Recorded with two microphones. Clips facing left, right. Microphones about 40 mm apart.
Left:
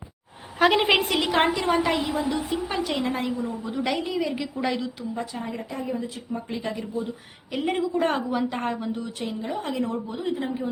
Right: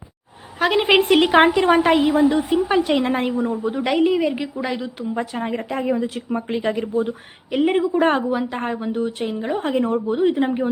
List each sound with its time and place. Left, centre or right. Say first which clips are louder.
0.6 s a woman's voice: right 1 dB; centre
1.1 s a woman's voice: right 8 dB; right
3.6 s a woman's voice: right 11 dB; right
4.6 s a woman's voice: right 1 dB; centre
5.0 s a woman's voice: right 6 dB; right
6.6 s speech: right 10 dB; right
7.5 s a woman's voice: right 7 dB; right
8.3 s a woman's voice: right 3 dB; centre
8.9 s a woman's voice: right 7 dB; right
10.2 s speech: right 10 dB; right